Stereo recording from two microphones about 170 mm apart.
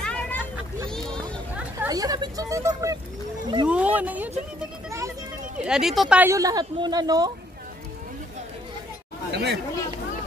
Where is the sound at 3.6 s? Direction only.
10° right (ahead or behind).